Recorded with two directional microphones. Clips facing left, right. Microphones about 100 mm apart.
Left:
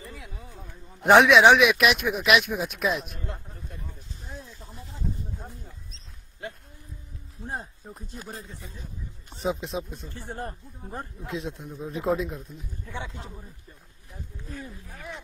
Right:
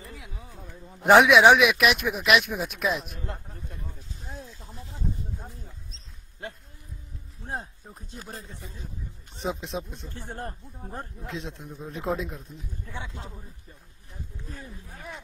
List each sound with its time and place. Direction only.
1.0 s speech: centre (ahead or behind)
7.4 s speech: centre (ahead or behind)
9.3 s speech: centre (ahead or behind)
14.5 s speech: 20° right (ahead or behind)